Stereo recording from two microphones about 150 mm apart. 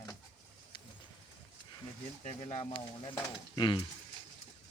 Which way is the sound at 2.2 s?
40° left (ahead or behind).